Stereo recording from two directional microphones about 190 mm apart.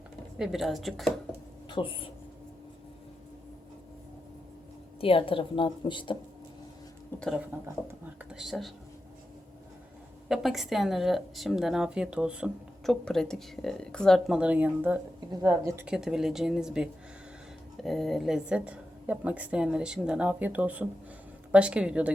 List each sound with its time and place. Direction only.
0.3 s a woman's voice: centre (ahead or behind)
1.7 s a woman's voice: 25° left (ahead or behind)
4.9 s a woman's voice: 30° left (ahead or behind)
7.2 s a woman's voice: centre (ahead or behind)
10.2 s a woman's voice: centre (ahead or behind)